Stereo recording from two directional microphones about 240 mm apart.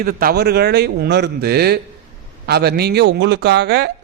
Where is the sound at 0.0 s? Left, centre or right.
Right.